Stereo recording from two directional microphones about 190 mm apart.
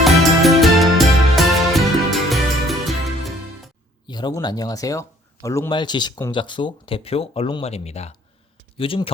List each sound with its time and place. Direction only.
0.0 s music: centre (ahead or behind)
4.0 s speech: 25° left (ahead or behind)